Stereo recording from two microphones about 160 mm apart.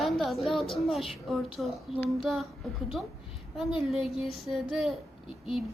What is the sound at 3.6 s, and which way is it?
A child's voice, centre (ahead or behind).